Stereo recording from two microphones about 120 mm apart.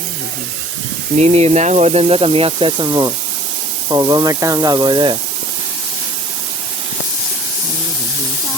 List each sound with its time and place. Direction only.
1.2 s speech: 60° right (ahead or behind); by 2.8 s 45° right (ahead or behind)
2.8 s speech: 30° right (ahead or behind)